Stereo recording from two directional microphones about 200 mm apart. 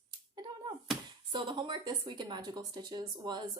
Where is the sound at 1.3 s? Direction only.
25° right (ahead or behind).